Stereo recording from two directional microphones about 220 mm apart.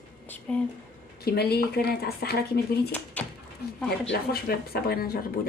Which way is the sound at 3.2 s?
5° left (ahead or behind).